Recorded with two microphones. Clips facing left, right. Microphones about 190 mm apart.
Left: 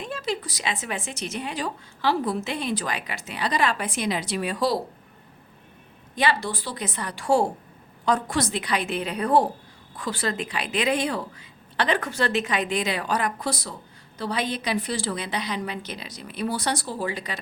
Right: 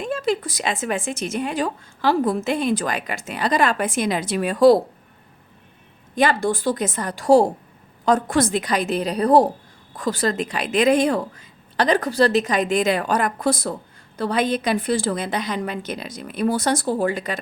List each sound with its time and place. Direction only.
0.0 s a woman's voice: 50° right (ahead or behind)
6.1 s a woman's voice: 50° right (ahead or behind)